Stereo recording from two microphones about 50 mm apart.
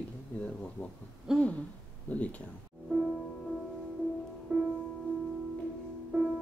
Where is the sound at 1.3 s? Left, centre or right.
Centre.